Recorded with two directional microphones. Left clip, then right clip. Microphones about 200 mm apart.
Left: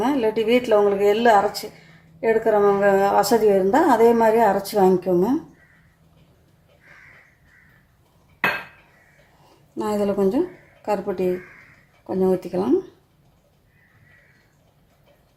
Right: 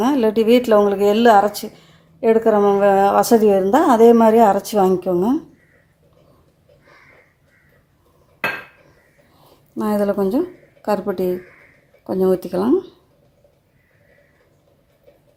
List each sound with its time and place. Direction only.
0.0 s a woman's voice: 35° right (ahead or behind)
9.7 s a woman's voice: 25° right (ahead or behind)